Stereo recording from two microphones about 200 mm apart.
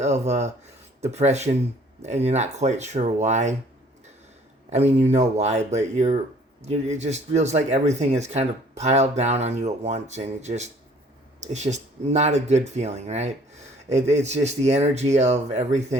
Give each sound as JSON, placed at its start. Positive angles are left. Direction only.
{"t": 0.0, "sound": "speech", "side_deg": -35}
{"t": 4.7, "sound": "speech", "side_deg": -30}